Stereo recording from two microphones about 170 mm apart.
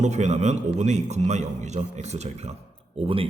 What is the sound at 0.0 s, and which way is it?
A man's voice, 45° right (ahead or behind).